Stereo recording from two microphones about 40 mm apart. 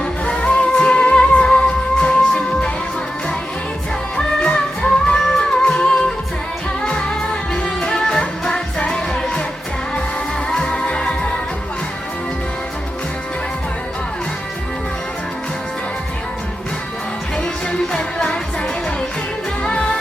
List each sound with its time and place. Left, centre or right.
0.3 s music: left
4.4 s music: left
10.5 s music: left
17.7 s music: left
19.6 s music of asia: left